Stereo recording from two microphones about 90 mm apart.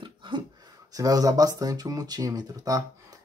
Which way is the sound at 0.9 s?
40° right (ahead or behind).